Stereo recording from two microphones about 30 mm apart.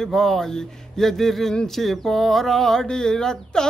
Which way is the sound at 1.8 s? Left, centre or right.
Centre.